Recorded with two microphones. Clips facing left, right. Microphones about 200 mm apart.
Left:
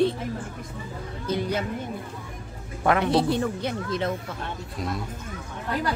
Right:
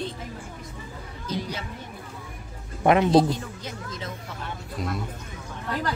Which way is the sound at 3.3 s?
65° left (ahead or behind).